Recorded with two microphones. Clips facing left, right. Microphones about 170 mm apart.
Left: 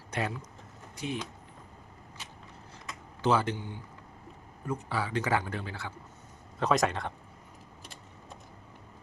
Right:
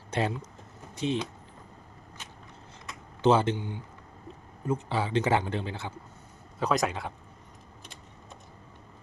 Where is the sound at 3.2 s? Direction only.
25° right (ahead or behind).